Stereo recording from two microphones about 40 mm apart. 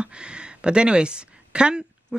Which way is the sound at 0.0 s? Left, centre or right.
Right.